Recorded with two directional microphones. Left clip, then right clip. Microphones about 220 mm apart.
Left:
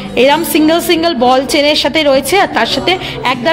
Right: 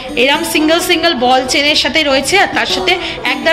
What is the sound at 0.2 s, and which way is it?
A woman's voice, 50° left (ahead or behind).